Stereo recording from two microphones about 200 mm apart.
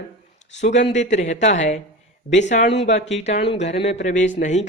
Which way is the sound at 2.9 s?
35° left (ahead or behind).